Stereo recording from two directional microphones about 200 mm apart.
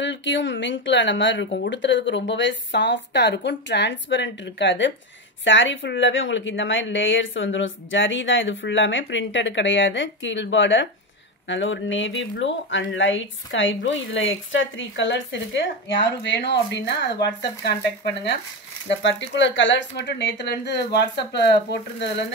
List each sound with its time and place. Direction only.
0.0 s speech: 65° left (ahead or behind)
18.9 s speech: 65° left (ahead or behind)